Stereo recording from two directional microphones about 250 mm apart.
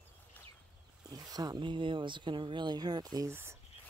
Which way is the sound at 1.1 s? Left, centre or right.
Centre.